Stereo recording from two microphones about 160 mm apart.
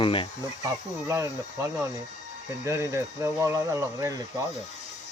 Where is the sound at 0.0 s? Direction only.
35° left (ahead or behind).